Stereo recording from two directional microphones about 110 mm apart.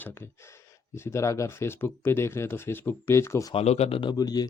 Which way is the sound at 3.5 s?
75° left (ahead or behind).